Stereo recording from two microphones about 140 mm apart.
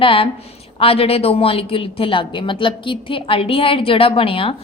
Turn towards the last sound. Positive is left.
turn(degrees=40)  # may be behind; listen again after turning